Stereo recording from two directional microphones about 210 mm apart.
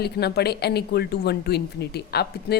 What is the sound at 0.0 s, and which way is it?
A woman's voice, 50° left (ahead or behind).